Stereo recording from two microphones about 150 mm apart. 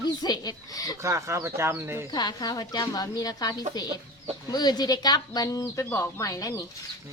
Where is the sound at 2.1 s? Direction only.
25° left (ahead or behind).